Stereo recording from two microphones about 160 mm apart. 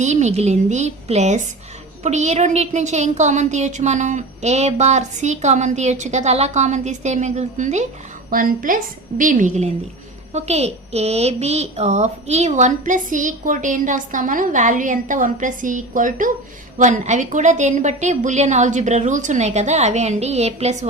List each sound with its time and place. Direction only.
0.0 s a woman's voice: 45° right (ahead or behind)
8.3 s a woman's voice: 60° right (ahead or behind); by 20.8 s 45° right (ahead or behind)